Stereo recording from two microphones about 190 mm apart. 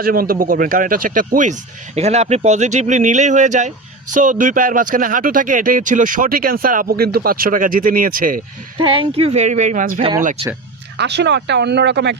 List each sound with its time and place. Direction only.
0.0 s speech: 50° right (ahead or behind)
2.0 s speech: 35° right (ahead or behind)
8.8 s speech: 25° right (ahead or behind); by 10.4 s 40° right (ahead or behind)
10.9 s speech: 60° right (ahead or behind)